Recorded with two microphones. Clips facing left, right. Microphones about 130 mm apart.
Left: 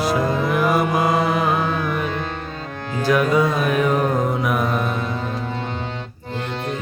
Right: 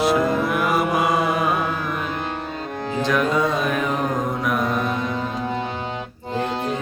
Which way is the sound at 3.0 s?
5° left (ahead or behind).